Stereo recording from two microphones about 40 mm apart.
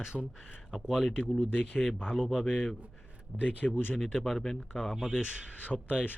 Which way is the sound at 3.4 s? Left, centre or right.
Right.